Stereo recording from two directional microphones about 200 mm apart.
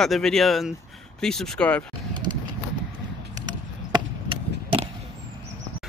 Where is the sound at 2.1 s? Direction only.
20° right (ahead or behind).